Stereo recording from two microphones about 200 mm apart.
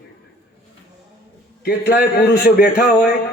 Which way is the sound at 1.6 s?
50° left (ahead or behind).